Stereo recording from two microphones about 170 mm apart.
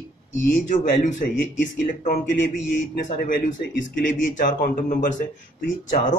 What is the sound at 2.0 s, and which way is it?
Speech, 60° left (ahead or behind).